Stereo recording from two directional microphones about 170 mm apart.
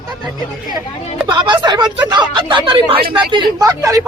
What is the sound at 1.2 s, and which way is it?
Speech, 30° right (ahead or behind).